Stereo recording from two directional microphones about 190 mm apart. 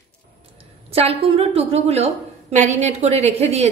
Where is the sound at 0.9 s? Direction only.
30° right (ahead or behind).